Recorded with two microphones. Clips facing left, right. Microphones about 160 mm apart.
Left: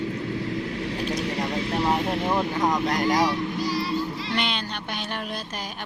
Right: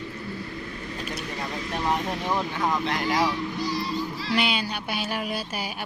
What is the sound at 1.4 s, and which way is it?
Vehicle, 30° left (ahead or behind).